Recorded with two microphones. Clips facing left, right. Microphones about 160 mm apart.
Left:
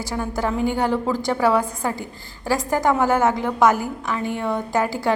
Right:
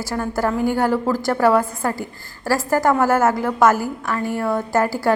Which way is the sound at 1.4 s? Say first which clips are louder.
Right 3 dB; 10° left (ahead or behind).